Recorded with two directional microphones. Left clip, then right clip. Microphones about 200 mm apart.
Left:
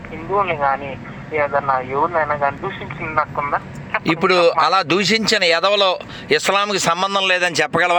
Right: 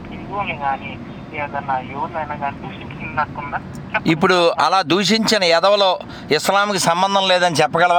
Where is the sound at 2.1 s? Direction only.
15° left (ahead or behind).